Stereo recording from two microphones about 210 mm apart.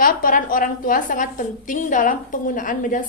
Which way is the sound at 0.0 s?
40° left (ahead or behind).